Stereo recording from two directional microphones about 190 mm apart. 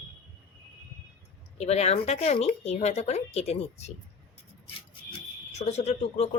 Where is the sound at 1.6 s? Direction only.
35° left (ahead or behind).